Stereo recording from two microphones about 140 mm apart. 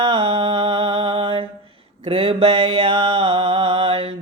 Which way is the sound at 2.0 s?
40° right (ahead or behind).